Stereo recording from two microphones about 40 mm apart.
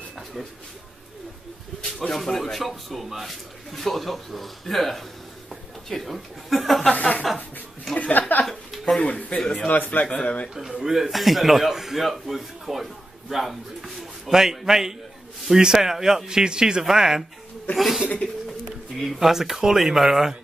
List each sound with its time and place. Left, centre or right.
1.8 s speech: centre
6.9 s speech: left
8.5 s a sound: centre
9.1 s speech: left
9.7 s speech: left
10.2 s speech: left
10.5 s a man's voice: centre
19.1 s a man's voice: centre